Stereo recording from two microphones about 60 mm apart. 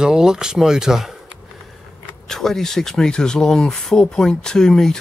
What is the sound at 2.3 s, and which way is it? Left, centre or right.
Speech, centre.